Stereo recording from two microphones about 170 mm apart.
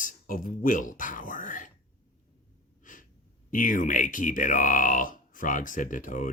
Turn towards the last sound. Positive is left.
turn(degrees=50)  # may be behind; listen again after turning